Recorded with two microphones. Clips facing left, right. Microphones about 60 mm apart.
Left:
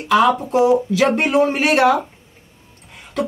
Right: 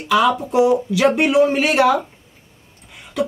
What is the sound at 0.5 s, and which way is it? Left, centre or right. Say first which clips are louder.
Speech: left 1 dB; centre.